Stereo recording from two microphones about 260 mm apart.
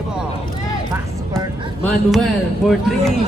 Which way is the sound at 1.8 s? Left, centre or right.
Centre.